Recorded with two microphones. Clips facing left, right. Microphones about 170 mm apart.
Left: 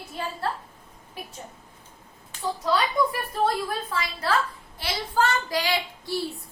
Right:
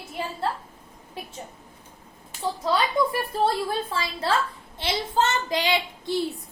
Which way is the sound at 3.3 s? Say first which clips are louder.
Right 1 dB; 30° right (ahead or behind).